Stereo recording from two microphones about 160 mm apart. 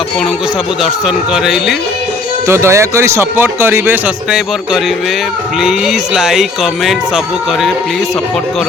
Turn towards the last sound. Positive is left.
turn(degrees=0)  # may be behind; listen again after turning